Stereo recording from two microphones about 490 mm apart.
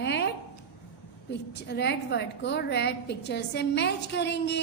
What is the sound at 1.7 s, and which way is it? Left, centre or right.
A woman's voice, left.